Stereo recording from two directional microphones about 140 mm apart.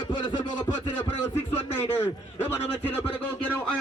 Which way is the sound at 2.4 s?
15° left (ahead or behind).